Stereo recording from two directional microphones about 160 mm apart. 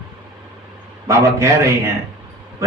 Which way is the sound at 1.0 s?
20° right (ahead or behind).